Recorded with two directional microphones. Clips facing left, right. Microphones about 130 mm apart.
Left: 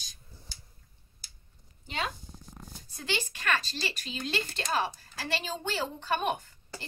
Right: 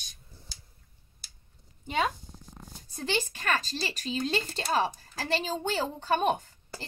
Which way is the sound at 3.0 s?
40° right (ahead or behind).